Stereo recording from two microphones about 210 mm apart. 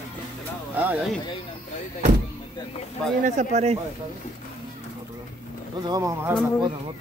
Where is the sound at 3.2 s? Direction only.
35° right (ahead or behind).